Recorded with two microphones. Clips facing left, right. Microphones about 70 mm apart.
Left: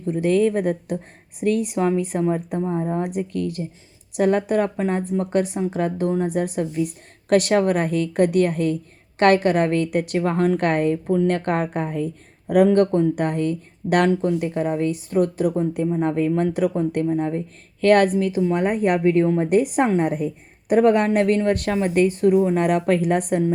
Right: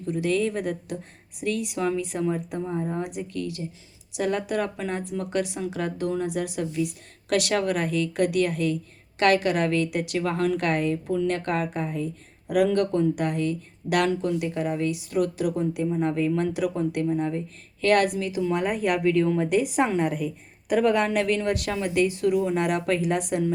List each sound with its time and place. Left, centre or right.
0.0 s a woman's voice: left
18.9 s speech: left
19.5 s a woman's voice: left